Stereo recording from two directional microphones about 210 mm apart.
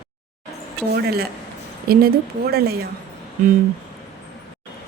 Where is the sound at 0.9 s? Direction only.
45° right (ahead or behind).